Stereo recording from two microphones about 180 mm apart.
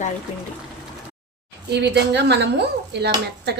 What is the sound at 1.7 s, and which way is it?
Speech, 70° right (ahead or behind).